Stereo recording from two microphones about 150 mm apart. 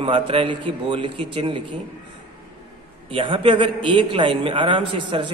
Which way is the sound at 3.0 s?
35° right (ahead or behind).